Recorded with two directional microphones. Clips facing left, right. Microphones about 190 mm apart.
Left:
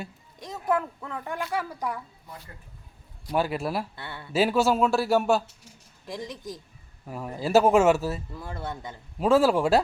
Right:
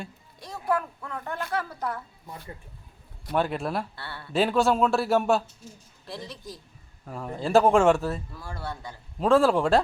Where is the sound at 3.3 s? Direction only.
5° left (ahead or behind).